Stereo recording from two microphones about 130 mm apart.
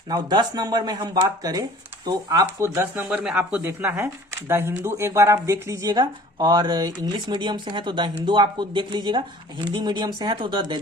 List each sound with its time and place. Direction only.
0.1 s speech: 30° right (ahead or behind)
2.7 s speech: 15° right (ahead or behind); by 10.8 s 35° right (ahead or behind)